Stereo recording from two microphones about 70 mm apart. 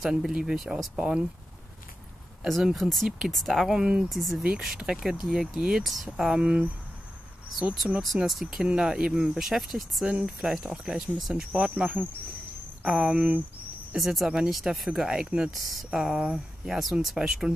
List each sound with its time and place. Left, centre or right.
0.0 s speech: centre
2.4 s speech: centre
8.0 s speech: centre
13.9 s speech: centre
15.5 s speech: centre